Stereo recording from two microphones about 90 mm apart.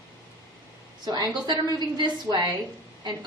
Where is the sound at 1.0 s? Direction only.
50° right (ahead or behind).